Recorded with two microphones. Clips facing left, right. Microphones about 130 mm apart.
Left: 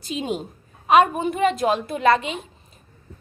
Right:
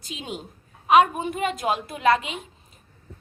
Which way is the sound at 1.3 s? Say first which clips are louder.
Left 9 dB; 40° left (ahead or behind).